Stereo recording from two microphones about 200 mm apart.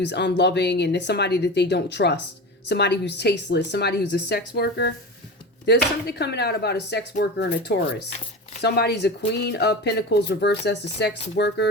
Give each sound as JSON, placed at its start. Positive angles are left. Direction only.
{"t": 0.0, "sound": "speech", "side_deg": 60}